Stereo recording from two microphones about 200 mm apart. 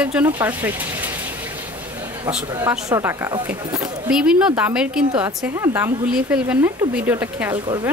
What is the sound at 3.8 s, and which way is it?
A woman's voice, 5° right (ahead or behind).